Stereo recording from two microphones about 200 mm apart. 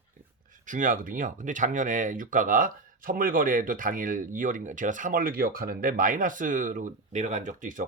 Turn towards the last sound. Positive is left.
turn(degrees=-40)  # may be behind; listen again after turning